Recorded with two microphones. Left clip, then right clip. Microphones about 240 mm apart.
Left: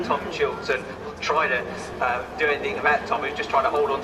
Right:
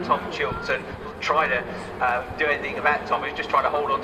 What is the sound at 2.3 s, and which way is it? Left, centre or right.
Speech, centre.